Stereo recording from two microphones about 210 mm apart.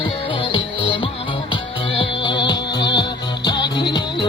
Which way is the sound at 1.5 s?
25° left (ahead or behind).